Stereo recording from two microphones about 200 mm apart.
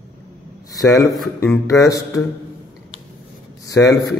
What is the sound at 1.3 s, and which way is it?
Speech, 10° left (ahead or behind).